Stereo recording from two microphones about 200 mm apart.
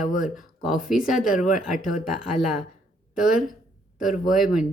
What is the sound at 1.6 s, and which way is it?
Speech, centre (ahead or behind).